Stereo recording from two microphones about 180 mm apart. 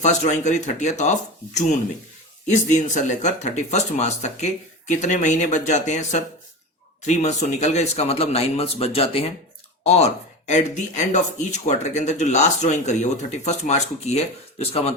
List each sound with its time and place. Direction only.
0.0 s speech: 40° left (ahead or behind)
2.5 s speech: 40° left (ahead or behind)